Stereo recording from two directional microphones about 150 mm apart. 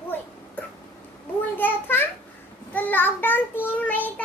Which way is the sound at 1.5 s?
15° left (ahead or behind).